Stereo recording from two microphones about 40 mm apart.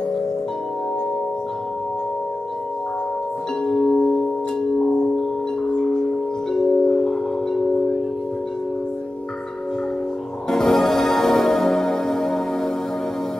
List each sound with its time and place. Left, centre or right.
3.6 s music: centre
3.9 s tubular bells: centre
5.8 s wind chime: centre
10.5 s music: centre